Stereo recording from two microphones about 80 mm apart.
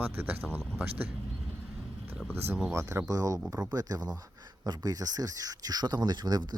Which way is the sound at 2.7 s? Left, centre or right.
Right.